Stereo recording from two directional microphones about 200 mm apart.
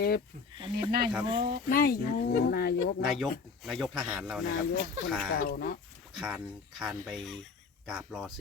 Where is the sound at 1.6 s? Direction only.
45° left (ahead or behind).